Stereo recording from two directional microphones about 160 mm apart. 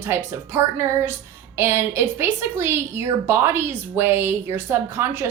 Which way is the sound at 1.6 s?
15° right (ahead or behind).